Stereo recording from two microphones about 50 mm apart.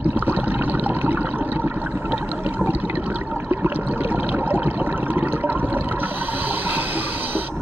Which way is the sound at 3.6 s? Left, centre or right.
Right.